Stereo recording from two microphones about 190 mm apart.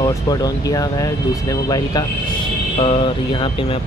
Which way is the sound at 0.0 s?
20° left (ahead or behind).